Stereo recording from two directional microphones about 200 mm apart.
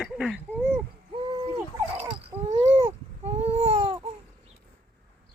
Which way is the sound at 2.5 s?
30° right (ahead or behind).